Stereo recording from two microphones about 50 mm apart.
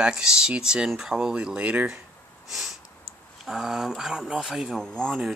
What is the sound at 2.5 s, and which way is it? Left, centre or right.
Sniff, centre.